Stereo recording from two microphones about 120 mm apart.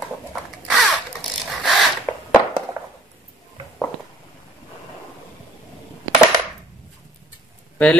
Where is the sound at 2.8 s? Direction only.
30° right (ahead or behind).